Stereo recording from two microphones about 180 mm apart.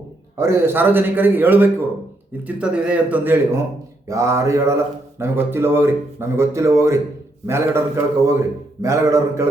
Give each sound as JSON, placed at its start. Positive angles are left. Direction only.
{"t": 0.3, "sound": "speech", "side_deg": -15}